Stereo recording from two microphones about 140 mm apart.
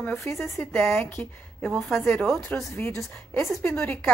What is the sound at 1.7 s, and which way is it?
A woman's voice, centre (ahead or behind).